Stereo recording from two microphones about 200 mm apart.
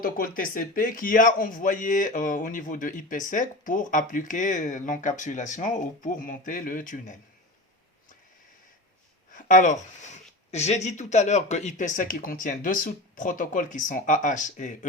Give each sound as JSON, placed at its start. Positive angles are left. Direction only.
{"t": 0.0, "sound": "speech", "side_deg": 45}
{"t": 9.3, "sound": "speech", "side_deg": 40}